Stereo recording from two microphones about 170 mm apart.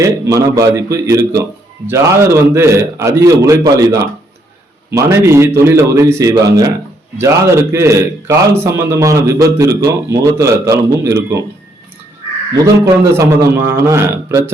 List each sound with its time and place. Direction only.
0.0 s a man's voice: 20° right (ahead or behind)
12.6 s a man's voice: 15° right (ahead or behind)